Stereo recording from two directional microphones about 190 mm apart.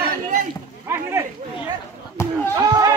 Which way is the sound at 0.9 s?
10° right (ahead or behind).